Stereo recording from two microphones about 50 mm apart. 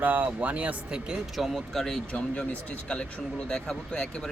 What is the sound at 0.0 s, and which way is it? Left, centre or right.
Speech, right.